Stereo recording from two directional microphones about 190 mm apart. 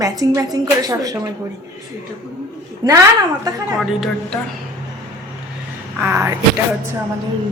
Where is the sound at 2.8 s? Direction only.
20° right (ahead or behind).